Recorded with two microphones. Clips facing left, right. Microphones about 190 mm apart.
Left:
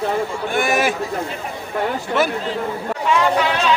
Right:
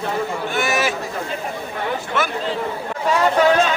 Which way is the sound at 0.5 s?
55° left (ahead or behind).